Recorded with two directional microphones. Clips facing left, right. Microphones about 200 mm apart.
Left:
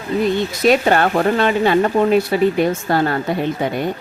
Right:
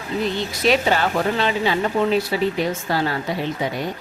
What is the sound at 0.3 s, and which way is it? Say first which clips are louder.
Speech: left 3 dB; 50° left (ahead or behind).